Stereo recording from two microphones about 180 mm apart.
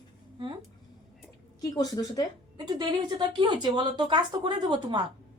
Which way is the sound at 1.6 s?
20° left (ahead or behind).